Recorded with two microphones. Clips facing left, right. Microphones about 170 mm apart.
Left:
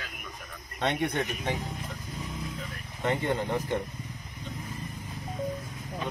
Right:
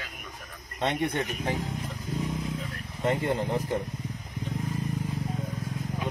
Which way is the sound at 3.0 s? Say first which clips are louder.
Right 1 dB; 5° right (ahead or behind).